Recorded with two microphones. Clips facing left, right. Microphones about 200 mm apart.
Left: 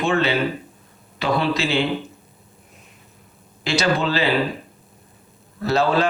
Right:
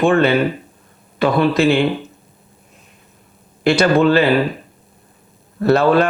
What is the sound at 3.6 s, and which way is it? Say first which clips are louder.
Speech: right 8 dB; 55° right (ahead or behind).